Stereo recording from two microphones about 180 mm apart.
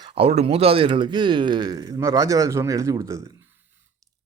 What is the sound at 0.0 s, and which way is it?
A man's voice, 30° right (ahead or behind).